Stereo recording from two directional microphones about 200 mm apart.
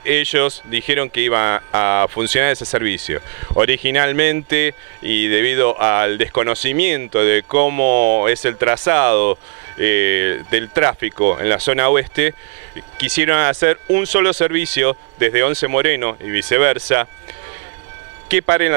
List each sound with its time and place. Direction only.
0.0 s speech: 15° right (ahead or behind)